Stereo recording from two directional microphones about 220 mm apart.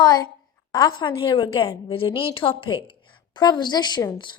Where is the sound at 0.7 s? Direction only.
20° left (ahead or behind).